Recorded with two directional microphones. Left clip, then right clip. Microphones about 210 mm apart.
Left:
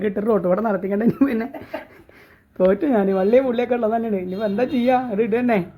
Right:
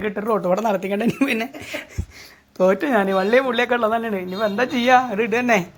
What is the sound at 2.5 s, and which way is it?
A man's voice, centre (ahead or behind).